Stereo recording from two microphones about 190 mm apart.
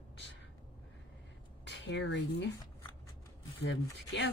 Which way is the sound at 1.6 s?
70° left (ahead or behind).